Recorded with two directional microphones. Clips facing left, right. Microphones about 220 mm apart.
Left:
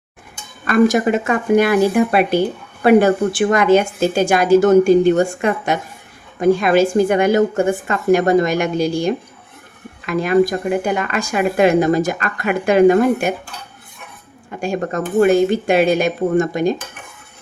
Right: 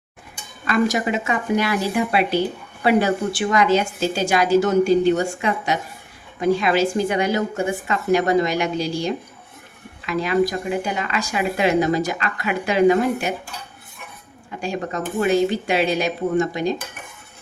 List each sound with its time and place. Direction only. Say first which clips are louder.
0.7 s speech: left 6 dB; 50° left (ahead or behind)
14.6 s speech: left 5 dB; 50° left (ahead or behind)